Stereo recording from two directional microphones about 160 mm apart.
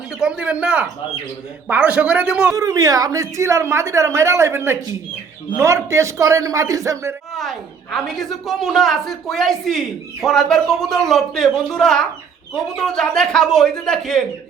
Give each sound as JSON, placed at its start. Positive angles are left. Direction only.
{"t": 0.2, "sound": "a woman's voice", "side_deg": -5}
{"t": 2.5, "sound": "a woman's voice", "side_deg": -20}
{"t": 7.3, "sound": "a woman's voice", "side_deg": 0}